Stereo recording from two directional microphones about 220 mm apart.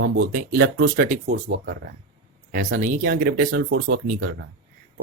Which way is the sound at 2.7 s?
35° right (ahead or behind).